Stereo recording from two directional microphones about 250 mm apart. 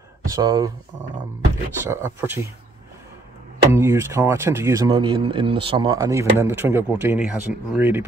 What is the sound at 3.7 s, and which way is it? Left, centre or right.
Speech, centre.